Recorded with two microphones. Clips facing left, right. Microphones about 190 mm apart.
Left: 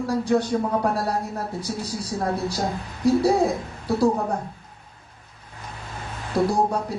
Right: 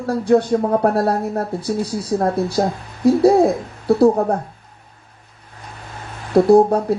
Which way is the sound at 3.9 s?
60° right (ahead or behind).